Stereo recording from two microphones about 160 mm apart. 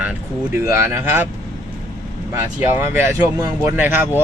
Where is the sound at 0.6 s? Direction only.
15° right (ahead or behind).